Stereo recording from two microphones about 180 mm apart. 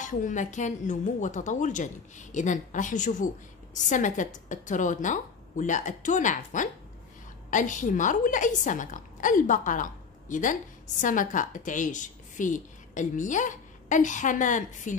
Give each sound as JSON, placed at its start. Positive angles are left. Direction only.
{"t": 0.0, "sound": "a woman's voice", "side_deg": 45}